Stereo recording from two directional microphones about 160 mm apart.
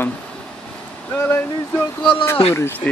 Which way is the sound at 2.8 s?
5° left (ahead or behind).